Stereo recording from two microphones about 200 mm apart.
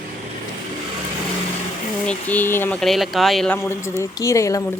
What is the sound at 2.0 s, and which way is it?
Speech, 10° left (ahead or behind).